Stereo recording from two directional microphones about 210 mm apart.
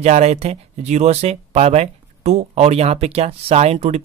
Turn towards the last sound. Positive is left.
turn(degrees=-30)  # may be behind; listen again after turning